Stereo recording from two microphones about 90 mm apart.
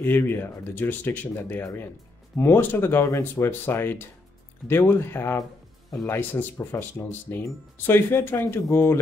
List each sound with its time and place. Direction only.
0.0 s speech: 25° left (ahead or behind)